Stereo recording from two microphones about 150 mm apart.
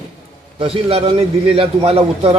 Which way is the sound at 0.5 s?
40° right (ahead or behind).